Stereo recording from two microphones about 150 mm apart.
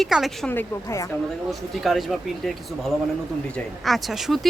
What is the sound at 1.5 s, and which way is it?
Speech, centre (ahead or behind).